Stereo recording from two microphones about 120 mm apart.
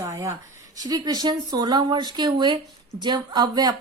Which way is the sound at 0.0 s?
25° right (ahead or behind).